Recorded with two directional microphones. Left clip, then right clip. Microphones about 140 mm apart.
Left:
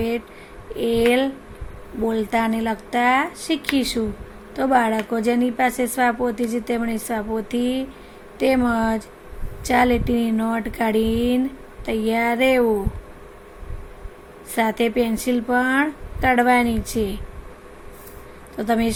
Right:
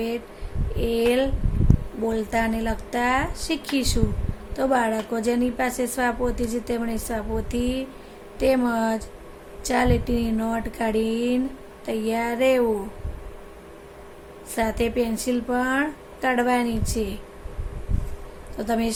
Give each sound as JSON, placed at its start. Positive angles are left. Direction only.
{"t": 0.8, "sound": "a woman's voice", "side_deg": 25}
{"t": 14.5, "sound": "a woman's voice", "side_deg": 25}
{"t": 18.5, "sound": "speech", "side_deg": 25}